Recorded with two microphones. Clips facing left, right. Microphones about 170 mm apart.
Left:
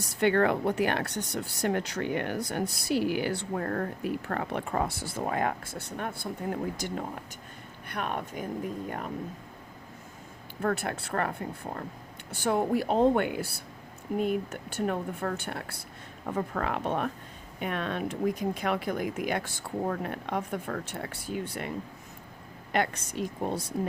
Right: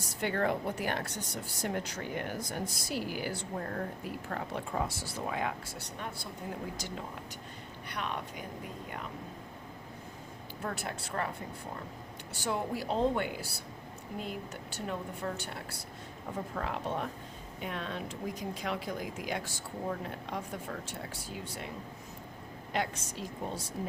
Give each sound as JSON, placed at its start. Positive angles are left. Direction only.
{"t": 0.0, "sound": "speech", "side_deg": 70}
{"t": 10.6, "sound": "speech", "side_deg": 60}
{"t": 12.3, "sound": "speech", "side_deg": 55}
{"t": 22.7, "sound": "speech", "side_deg": 60}